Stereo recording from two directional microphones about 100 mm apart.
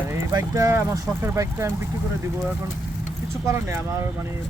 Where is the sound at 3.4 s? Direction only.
25° right (ahead or behind).